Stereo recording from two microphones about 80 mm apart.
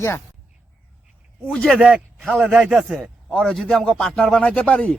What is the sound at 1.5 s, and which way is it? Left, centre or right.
Speech, centre.